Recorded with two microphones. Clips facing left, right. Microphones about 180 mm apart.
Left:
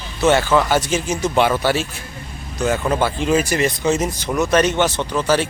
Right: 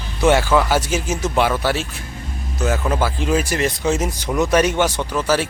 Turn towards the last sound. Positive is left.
turn(degrees=-5)  # may be behind; listen again after turning